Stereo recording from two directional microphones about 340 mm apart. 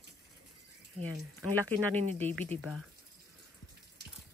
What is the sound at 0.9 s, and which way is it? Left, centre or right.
Speech, centre.